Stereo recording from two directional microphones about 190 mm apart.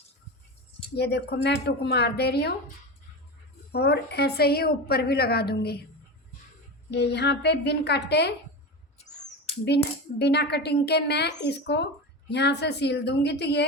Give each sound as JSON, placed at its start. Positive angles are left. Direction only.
{"t": 0.9, "sound": "a child's voice", "side_deg": 60}
{"t": 3.7, "sound": "a child's voice", "side_deg": 60}
{"t": 6.9, "sound": "a child's voice", "side_deg": 60}
{"t": 9.6, "sound": "a child's voice", "side_deg": 60}